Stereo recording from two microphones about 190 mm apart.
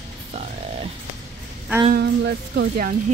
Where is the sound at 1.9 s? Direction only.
60° right (ahead or behind).